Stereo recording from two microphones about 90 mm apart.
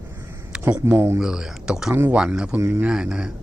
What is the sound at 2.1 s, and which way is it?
Speech, 10° right (ahead or behind).